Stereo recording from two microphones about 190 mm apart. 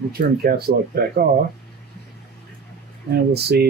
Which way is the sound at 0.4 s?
55° right (ahead or behind).